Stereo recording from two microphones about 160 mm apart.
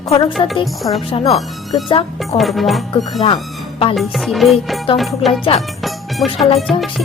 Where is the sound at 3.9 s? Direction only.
Centre (ahead or behind).